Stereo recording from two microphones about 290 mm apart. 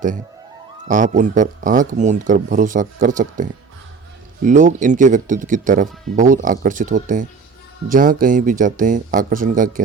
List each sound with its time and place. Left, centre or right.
0.9 s speech: right